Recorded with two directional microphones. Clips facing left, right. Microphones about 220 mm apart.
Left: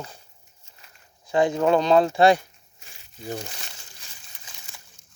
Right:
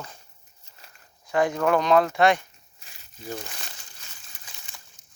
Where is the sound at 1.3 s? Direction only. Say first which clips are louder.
Left 2 dB; 25° left (ahead or behind).